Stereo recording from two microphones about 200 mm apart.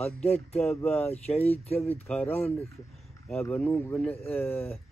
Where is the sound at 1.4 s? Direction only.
30° left (ahead or behind).